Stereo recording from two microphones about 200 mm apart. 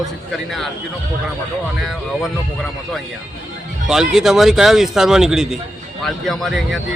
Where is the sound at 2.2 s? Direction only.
Centre (ahead or behind).